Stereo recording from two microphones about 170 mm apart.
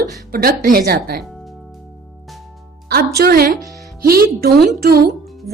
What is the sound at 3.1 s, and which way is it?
Speech, 65° right (ahead or behind).